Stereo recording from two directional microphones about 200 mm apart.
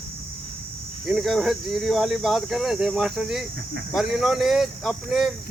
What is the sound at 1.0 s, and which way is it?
Speech, centre (ahead or behind).